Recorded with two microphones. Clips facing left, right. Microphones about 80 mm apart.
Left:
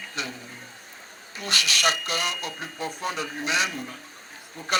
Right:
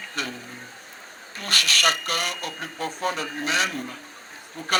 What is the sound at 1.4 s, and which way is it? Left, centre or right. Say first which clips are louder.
Speech: right 2 dB; right.